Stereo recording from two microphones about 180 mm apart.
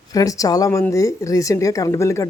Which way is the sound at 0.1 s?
20° left (ahead or behind).